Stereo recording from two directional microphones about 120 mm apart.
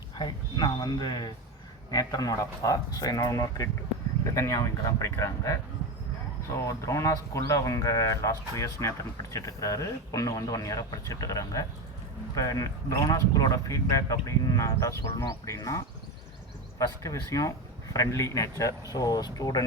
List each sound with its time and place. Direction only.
0.2 s speech: 40° left (ahead or behind)
6.7 s speech: 25° left (ahead or behind)